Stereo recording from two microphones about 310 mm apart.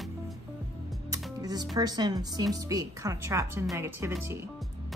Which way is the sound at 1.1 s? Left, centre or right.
Centre.